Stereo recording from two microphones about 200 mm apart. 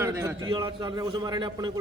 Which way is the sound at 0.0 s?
15° right (ahead or behind).